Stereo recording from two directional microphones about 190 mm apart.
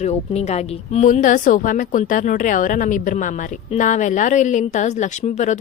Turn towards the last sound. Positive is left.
turn(degrees=40)  # may be behind; listen again after turning